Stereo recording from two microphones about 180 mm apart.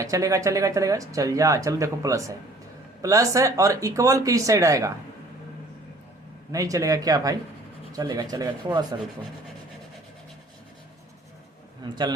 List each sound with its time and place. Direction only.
0.0 s speech: 20° right (ahead or behind)
6.5 s speech: 20° right (ahead or behind)
11.8 s speech: 25° right (ahead or behind)